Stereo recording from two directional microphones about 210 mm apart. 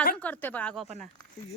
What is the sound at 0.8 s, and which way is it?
Speech, 35° right (ahead or behind).